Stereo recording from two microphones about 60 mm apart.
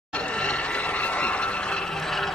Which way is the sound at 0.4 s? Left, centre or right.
Centre.